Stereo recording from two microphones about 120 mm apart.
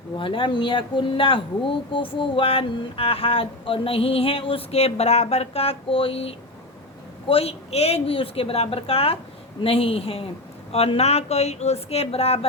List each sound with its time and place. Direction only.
0.2 s speech: 45° left (ahead or behind)